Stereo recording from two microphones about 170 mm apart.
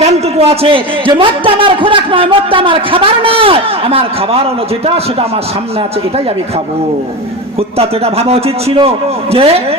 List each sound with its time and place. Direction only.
0.0 s a man's voice: 35° right (ahead or behind)
7.8 s a man's voice: 35° right (ahead or behind)